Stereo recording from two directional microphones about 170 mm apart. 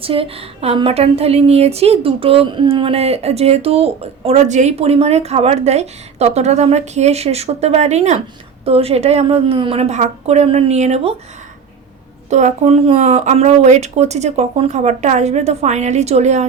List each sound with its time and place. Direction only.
0.0 s a woman's voice: 35° right (ahead or behind)
12.3 s a woman's voice: 45° right (ahead or behind)